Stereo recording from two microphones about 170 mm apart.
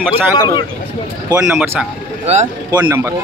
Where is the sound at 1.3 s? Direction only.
10° right (ahead or behind).